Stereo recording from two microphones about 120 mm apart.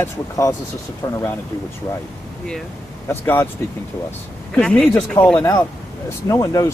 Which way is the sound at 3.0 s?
15° left (ahead or behind).